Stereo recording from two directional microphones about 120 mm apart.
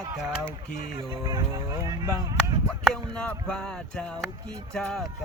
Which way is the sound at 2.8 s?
5° left (ahead or behind).